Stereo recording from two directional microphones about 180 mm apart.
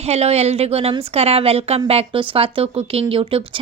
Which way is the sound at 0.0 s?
35° right (ahead or behind).